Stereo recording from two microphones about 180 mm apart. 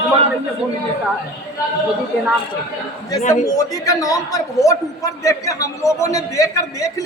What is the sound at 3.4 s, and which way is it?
A man's voice, 20° left (ahead or behind).